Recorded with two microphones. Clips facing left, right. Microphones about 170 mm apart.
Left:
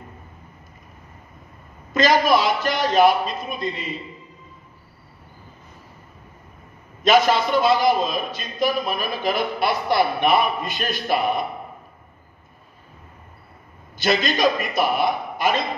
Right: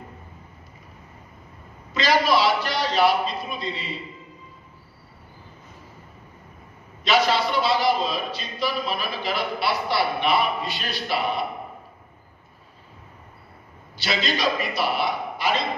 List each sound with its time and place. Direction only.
2.0 s a man's voice: 45° left (ahead or behind)
7.0 s a man's voice: 45° left (ahead or behind)
13.9 s a man's voice: 50° left (ahead or behind)